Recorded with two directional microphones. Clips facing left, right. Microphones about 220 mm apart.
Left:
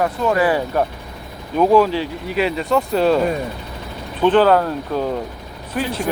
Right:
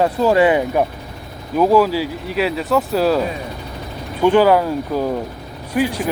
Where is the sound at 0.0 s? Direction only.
30° right (ahead or behind).